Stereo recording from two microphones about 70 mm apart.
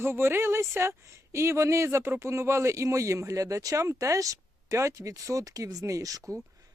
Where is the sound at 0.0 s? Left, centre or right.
Right.